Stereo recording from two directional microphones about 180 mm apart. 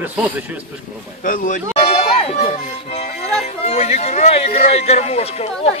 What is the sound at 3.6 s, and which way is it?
Speech, 35° left (ahead or behind).